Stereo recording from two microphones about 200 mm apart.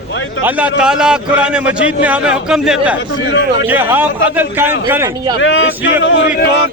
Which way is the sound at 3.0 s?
65° left (ahead or behind).